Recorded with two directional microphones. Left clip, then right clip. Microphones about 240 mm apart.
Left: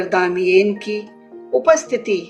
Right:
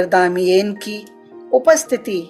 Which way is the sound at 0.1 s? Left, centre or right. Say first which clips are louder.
Left 2 dB; right.